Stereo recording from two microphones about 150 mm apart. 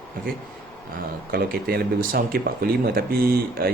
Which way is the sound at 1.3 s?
90° right.